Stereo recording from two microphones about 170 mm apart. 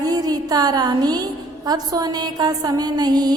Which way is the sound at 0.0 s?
20° right (ahead or behind).